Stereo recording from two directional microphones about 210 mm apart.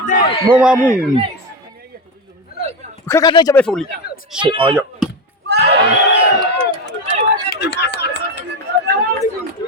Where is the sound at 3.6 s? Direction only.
5° left (ahead or behind).